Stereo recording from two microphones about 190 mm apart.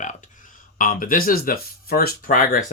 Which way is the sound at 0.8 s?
45° left (ahead or behind).